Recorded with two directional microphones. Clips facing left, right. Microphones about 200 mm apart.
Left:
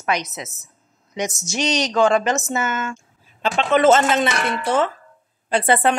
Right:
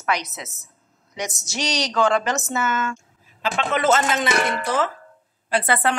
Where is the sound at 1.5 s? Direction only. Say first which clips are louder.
Left 4 dB; 20° left (ahead or behind).